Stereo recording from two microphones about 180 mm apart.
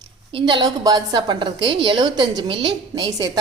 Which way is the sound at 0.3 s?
30° right (ahead or behind).